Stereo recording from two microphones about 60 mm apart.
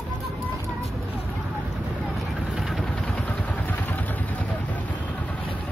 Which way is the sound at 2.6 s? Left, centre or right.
Centre.